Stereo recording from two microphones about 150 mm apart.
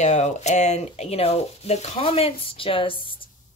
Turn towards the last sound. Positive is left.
turn(degrees=35)  # may be behind; listen again after turning